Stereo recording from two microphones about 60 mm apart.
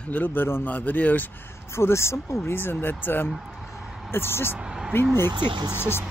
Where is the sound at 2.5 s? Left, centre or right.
Left.